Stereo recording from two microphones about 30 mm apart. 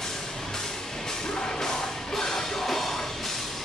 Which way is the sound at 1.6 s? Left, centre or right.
Centre.